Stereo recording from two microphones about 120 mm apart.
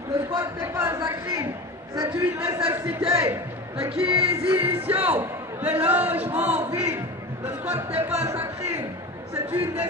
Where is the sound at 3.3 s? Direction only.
20° right (ahead or behind).